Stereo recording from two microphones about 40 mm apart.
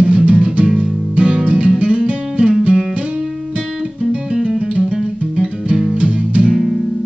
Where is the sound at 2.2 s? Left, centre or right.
Right.